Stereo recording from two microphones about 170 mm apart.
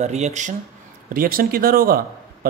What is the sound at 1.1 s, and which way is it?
Speech, 60° right (ahead or behind).